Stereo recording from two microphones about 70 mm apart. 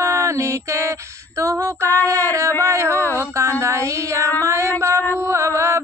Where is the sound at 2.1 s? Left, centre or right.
Right.